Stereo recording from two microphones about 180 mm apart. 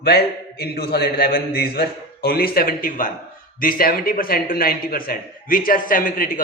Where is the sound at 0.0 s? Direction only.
60° left (ahead or behind).